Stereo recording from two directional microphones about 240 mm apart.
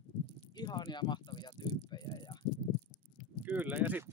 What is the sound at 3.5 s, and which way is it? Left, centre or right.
Speech, centre.